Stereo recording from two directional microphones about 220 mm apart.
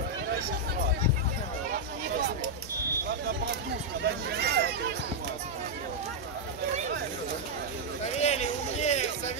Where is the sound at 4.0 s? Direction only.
50° right (ahead or behind).